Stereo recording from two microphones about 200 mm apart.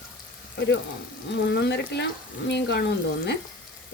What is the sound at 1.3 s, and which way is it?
Speech, 60° left (ahead or behind).